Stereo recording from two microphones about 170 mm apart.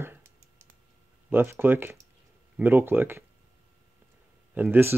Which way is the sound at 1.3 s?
10° right (ahead or behind).